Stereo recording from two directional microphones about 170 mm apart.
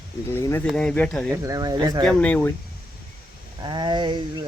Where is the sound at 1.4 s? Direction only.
20° right (ahead or behind).